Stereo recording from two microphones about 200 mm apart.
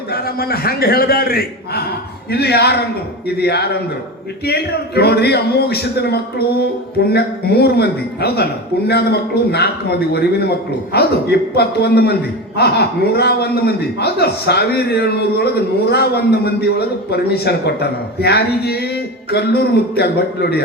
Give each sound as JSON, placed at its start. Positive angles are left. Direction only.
{"t": 0.1, "sound": "a man's voice", "side_deg": 50}
{"t": 10.9, "sound": "a man's voice", "side_deg": 55}